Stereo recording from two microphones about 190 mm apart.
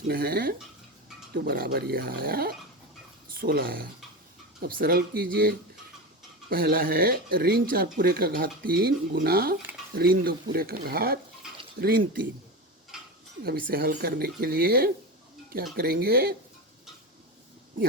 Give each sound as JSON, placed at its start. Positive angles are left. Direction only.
{"t": 0.1, "sound": "speech", "side_deg": -55}
{"t": 6.5, "sound": "speech", "side_deg": -50}
{"t": 13.4, "sound": "speech", "side_deg": -55}